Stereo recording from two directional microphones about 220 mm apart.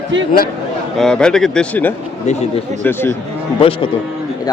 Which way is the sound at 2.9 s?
10° left (ahead or behind).